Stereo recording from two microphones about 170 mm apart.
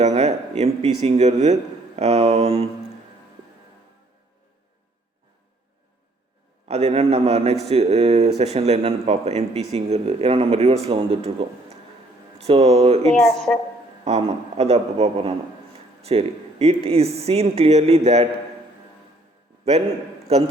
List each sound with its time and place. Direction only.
0.0 s speech: 40° right (ahead or behind)
6.7 s speech: 40° right (ahead or behind)
13.1 s speech: 5° left (ahead or behind)
14.0 s speech: 40° right (ahead or behind)
20.3 s speech: 35° right (ahead or behind)